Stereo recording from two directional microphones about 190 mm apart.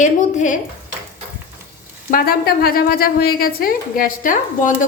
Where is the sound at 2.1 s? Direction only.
50° left (ahead or behind).